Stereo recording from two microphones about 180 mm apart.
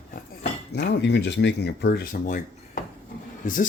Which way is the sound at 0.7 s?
70° left (ahead or behind).